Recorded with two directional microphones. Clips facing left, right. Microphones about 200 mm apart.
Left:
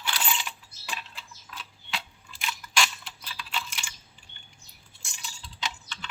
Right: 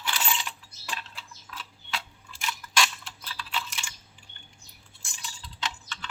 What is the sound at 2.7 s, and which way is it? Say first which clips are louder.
Mechanisms: right 1 dB; centre (ahead or behind).